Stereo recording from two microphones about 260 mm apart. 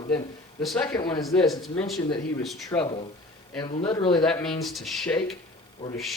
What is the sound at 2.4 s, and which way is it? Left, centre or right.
Speech, centre.